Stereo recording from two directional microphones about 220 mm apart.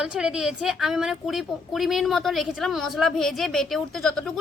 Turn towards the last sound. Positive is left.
turn(degrees=0)  # may be behind; listen again after turning